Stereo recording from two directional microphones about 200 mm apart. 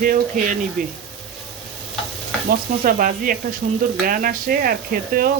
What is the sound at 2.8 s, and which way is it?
Speech, 45° right (ahead or behind).